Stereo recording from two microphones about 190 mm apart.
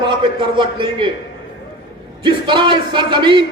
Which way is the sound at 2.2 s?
25° right (ahead or behind).